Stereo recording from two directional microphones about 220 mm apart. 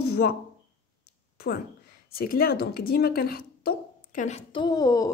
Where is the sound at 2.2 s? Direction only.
40° left (ahead or behind); by 5.1 s 15° left (ahead or behind).